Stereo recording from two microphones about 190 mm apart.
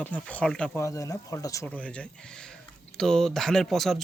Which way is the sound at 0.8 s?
15° left (ahead or behind).